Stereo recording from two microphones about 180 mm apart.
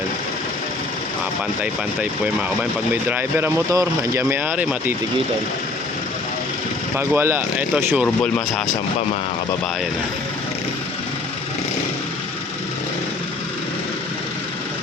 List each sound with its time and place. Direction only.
2.9 s speech: 10° right (ahead or behind)
6.9 s speech: 10° right (ahead or behind)
8.0 s speech: 5° left (ahead or behind)